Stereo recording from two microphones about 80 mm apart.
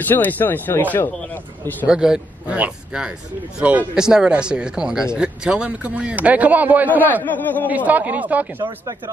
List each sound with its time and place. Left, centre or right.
0.0 s speech: left
1.9 s speech: centre
7.3 s speech: left
7.6 s speech: right